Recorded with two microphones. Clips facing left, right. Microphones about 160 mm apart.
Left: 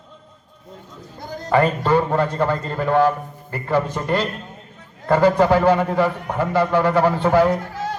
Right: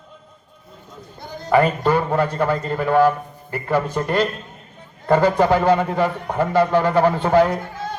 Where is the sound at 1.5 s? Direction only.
10° right (ahead or behind).